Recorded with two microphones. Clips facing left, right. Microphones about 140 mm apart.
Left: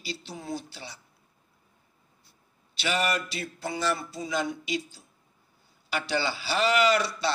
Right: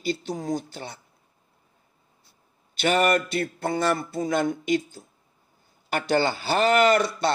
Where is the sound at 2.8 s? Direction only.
50° right (ahead or behind).